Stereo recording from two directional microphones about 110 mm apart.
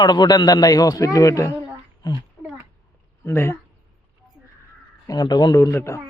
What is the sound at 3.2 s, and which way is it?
Speech, 25° left (ahead or behind).